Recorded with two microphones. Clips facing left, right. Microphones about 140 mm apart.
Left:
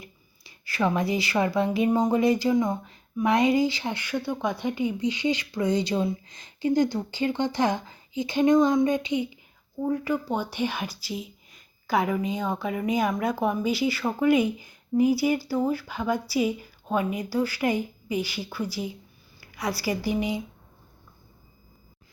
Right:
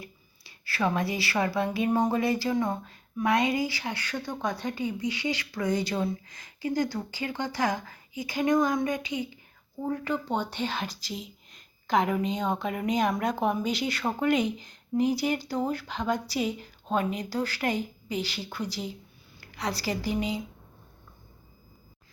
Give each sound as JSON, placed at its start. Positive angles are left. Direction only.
{"t": 0.4, "sound": "speech", "side_deg": 20}
{"t": 9.9, "sound": "speech", "side_deg": 10}